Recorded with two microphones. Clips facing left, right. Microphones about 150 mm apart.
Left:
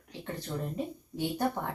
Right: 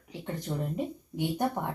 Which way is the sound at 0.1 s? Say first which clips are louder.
Right 3 dB; 15° right (ahead or behind).